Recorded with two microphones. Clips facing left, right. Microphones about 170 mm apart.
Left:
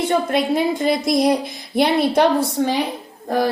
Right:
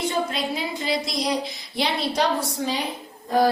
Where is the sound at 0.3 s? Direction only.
55° left (ahead or behind).